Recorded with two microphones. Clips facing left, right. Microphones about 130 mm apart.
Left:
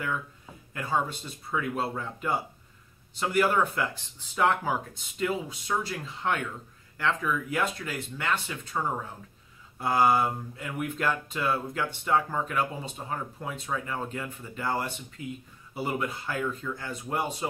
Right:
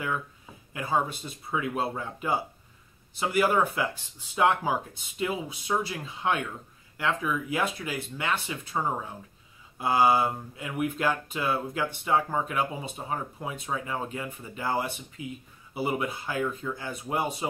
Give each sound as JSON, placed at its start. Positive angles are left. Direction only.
{"t": 0.8, "sound": "speech", "side_deg": -10}